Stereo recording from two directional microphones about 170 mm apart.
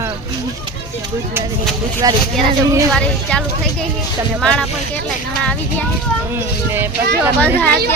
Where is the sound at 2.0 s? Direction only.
20° right (ahead or behind).